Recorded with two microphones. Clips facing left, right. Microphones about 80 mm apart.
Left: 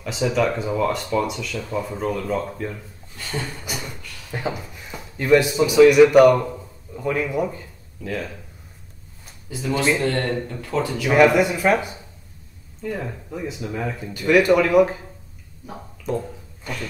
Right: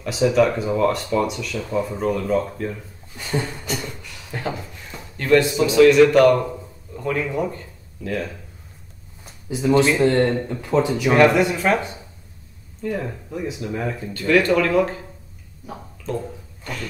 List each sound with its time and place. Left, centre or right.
0.0 s speech: centre
3.2 s a sound: centre
3.6 s beatboxing: centre
4.3 s a man's voice: centre
9.5 s speech: centre
11.1 s speech: centre
14.1 s speech: centre
15.6 s gargling: centre